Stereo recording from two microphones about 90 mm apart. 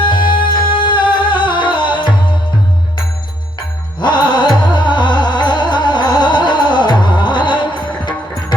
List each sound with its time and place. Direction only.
0.0 s music: 60° left (ahead or behind)
4.0 s music: 55° left (ahead or behind)